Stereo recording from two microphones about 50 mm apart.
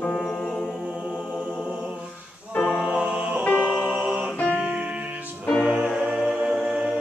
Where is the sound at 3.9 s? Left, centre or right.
Right.